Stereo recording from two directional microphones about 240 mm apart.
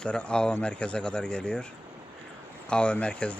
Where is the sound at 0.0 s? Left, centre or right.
Centre.